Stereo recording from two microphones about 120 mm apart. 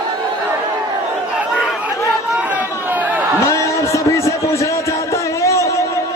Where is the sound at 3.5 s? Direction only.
25° left (ahead or behind).